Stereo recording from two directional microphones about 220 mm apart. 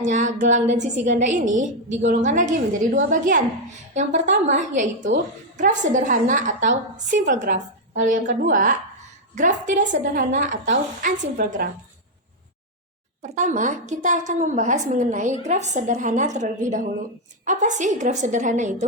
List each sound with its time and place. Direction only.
0.0 s a woman's voice: 35° right (ahead or behind)
13.2 s a woman's voice: 35° right (ahead or behind)